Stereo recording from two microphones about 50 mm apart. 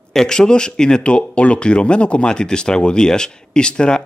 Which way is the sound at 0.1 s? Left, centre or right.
Centre.